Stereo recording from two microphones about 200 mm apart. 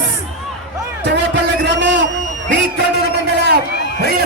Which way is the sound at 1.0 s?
60° right (ahead or behind).